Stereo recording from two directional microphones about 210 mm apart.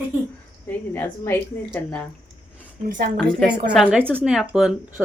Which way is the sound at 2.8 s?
40° right (ahead or behind).